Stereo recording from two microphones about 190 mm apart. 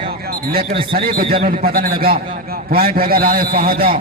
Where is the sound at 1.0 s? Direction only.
50° right (ahead or behind).